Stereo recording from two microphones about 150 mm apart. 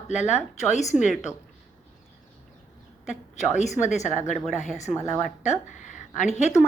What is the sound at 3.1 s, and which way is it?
A woman's voice, 50° left (ahead or behind).